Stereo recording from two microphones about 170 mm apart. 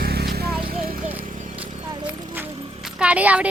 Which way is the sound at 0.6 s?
60° right (ahead or behind).